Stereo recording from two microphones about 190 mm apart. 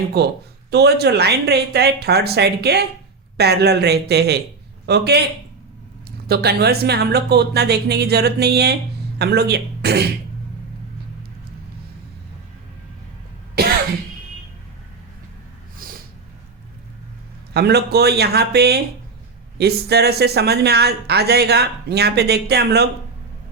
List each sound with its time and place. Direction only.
0.2 s speech: 60° right (ahead or behind)
13.6 s cough: 60° right (ahead or behind)
15.8 s snort: 50° right (ahead or behind)
17.5 s speech: 60° right (ahead or behind)